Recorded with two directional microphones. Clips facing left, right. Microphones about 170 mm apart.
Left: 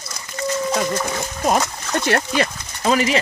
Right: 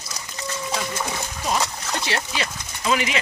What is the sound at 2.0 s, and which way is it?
Speech, 50° left (ahead or behind).